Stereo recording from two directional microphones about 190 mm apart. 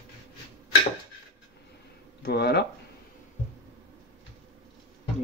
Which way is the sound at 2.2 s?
60° left (ahead or behind).